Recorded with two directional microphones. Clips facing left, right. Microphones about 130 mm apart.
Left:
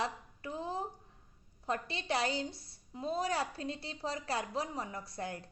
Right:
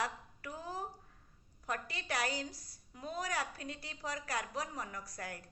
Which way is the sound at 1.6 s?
25° left (ahead or behind).